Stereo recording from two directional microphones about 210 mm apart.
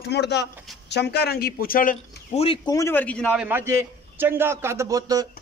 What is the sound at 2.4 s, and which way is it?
Speech, 25° left (ahead or behind).